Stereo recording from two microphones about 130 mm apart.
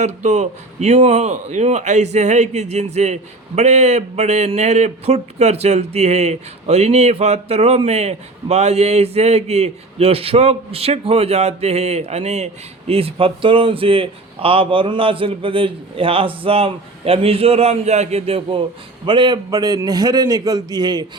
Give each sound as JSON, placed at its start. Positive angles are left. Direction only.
{"t": 0.0, "sound": "a man's voice", "side_deg": -60}
{"t": 12.9, "sound": "a man's voice", "side_deg": -45}
{"t": 19.0, "sound": "a man's voice", "side_deg": -35}